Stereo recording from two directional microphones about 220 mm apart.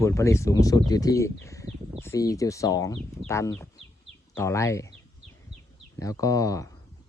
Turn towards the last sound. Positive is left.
turn(degrees=15)  # may be behind; listen again after turning